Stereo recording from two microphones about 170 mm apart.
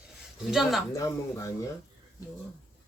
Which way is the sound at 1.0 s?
15° left (ahead or behind).